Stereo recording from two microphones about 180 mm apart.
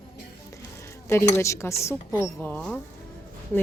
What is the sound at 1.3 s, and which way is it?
Speech, 15° left (ahead or behind).